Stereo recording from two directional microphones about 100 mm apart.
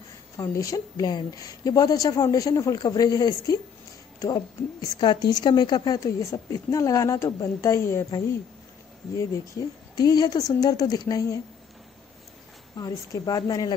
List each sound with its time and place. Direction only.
0.4 s a woman's voice: 35° left (ahead or behind)
4.6 s a woman's voice: 25° left (ahead or behind)
5.0 s speech: 45° left (ahead or behind)
5.9 s a woman's voice: 35° left (ahead or behind)
12.7 s a woman's voice: 40° left (ahead or behind)